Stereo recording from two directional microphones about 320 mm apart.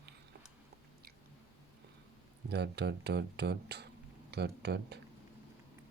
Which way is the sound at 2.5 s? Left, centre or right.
Right.